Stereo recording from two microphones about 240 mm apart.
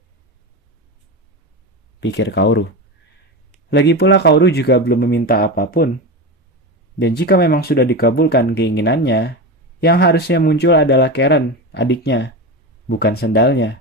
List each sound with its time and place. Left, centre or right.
2.0 s speech: left
3.7 s speech: left
7.0 s speech: left